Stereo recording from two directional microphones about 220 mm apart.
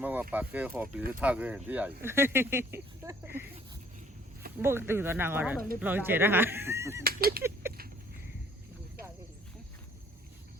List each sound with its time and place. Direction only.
0.0 s speech: 10° right (ahead or behind)
4.6 s speech: 10° right (ahead or behind)
7.0 s a sound: 45° right (ahead or behind)